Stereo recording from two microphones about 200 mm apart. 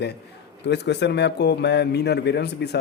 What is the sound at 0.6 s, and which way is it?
Speech, 60° left (ahead or behind).